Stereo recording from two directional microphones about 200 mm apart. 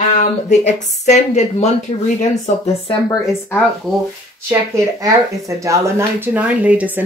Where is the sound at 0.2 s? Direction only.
35° left (ahead or behind).